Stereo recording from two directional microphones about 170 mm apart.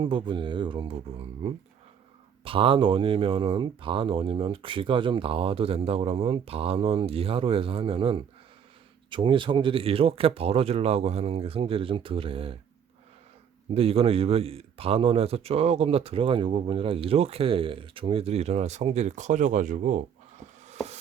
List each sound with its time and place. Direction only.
0.0 s speech: 30° right (ahead or behind)
13.7 s speech: 35° right (ahead or behind)